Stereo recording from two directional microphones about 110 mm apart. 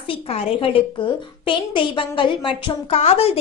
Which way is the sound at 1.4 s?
50° left (ahead or behind).